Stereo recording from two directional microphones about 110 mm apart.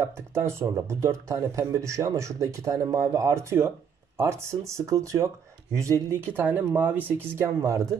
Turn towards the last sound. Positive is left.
turn(degrees=-25)  # may be behind; listen again after turning